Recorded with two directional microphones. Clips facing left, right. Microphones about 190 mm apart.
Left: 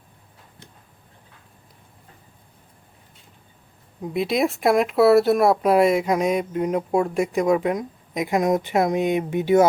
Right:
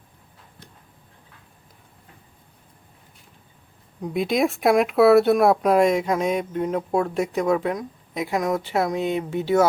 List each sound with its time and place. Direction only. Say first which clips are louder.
4.0 s speech: even; centre (ahead or behind)